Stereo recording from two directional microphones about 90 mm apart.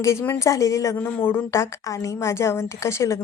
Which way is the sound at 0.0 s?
30° left (ahead or behind).